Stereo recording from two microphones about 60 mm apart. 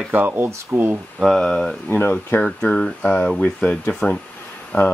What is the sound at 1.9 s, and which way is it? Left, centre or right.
Speech, left.